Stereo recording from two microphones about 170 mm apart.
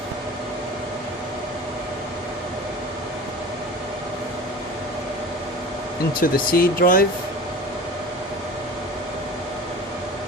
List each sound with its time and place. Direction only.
6.1 s speech: 55° left (ahead or behind)